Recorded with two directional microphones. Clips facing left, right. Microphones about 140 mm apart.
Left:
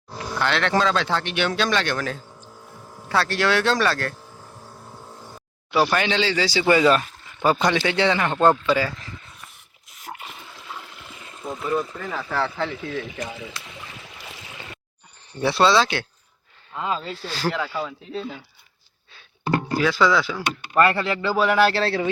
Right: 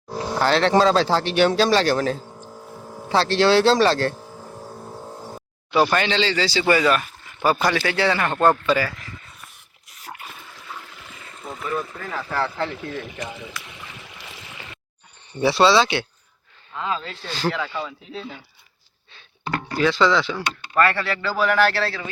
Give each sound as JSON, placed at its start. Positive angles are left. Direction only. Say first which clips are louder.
{"t": 0.2, "sound": "speech", "louder": "right 4 dB", "side_deg": -35}
{"t": 5.9, "sound": "a man's voice", "louder": "right 1 dB", "side_deg": 10}
{"t": 10.1, "sound": "water", "louder": "left 1 dB", "side_deg": 5}
{"t": 11.8, "sound": "speech", "louder": "left 1 dB", "side_deg": 0}
{"t": 15.3, "sound": "speech", "louder": "right 2 dB", "side_deg": 0}
{"t": 19.5, "sound": "speech", "louder": "right 1 dB", "side_deg": 5}
{"t": 20.7, "sound": "speech", "louder": "left 1 dB", "side_deg": 20}